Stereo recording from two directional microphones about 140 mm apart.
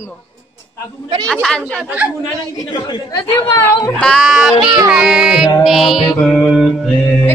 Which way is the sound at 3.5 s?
20° left (ahead or behind).